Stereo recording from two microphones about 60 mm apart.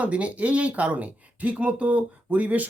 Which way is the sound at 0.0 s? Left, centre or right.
Right.